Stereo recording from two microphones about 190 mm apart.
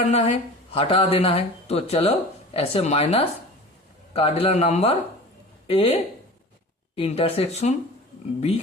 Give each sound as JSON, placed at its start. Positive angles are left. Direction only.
{"t": 0.1, "sound": "speech", "side_deg": 35}